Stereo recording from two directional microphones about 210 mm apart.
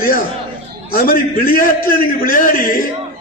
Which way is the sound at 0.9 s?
45° left (ahead or behind).